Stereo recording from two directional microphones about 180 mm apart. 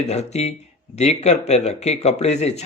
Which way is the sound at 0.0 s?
35° left (ahead or behind).